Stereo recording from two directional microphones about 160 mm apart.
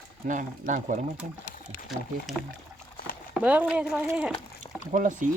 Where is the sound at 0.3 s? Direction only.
55° right (ahead or behind).